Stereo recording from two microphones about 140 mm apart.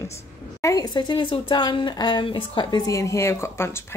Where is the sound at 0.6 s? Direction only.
25° left (ahead or behind).